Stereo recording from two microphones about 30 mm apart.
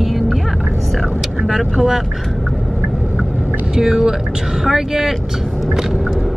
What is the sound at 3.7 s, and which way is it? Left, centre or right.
Speech, centre.